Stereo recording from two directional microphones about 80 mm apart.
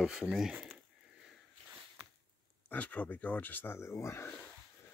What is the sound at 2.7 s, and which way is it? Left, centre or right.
Speech, centre.